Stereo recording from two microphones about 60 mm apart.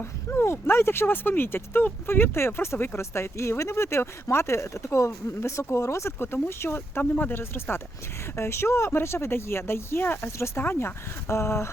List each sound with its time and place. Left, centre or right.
0.0 s speech: left
10.2 s speech: left